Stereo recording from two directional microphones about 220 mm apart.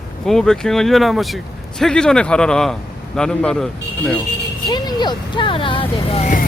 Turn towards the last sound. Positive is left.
turn(degrees=35)  # may be behind; listen again after turning